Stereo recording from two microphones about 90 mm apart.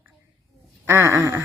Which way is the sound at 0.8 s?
30° right (ahead or behind).